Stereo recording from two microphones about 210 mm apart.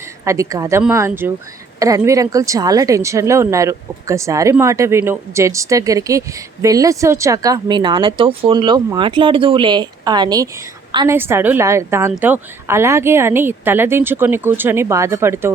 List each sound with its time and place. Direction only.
0.3 s a woman's voice: 15° right (ahead or behind)